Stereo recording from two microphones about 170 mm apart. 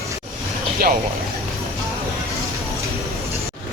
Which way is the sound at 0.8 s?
60° right (ahead or behind).